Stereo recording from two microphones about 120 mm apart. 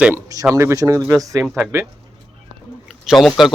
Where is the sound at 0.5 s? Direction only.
25° right (ahead or behind).